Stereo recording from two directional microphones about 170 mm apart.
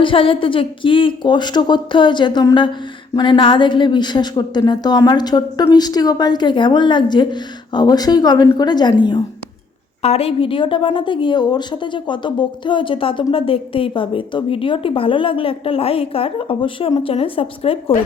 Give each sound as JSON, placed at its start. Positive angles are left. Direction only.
{"t": 0.0, "sound": "a woman's voice", "side_deg": 30}